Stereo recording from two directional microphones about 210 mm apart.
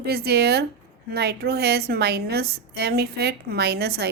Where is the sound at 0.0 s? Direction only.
50° right (ahead or behind).